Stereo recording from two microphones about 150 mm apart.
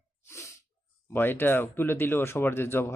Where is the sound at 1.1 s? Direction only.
15° left (ahead or behind).